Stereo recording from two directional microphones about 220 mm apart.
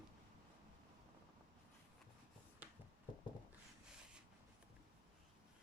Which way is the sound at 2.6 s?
5° right (ahead or behind).